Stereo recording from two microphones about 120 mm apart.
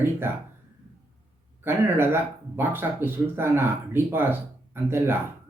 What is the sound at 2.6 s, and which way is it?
Speech, 20° right (ahead or behind).